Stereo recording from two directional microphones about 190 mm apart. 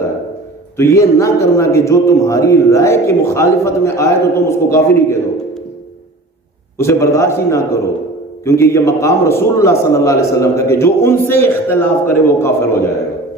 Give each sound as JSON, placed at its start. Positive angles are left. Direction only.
{"t": 0.8, "sound": "a man's voice", "side_deg": 15}
{"t": 6.7, "sound": "a man's voice", "side_deg": 15}